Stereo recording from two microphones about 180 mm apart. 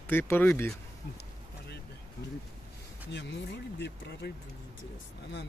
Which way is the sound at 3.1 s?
75° left (ahead or behind).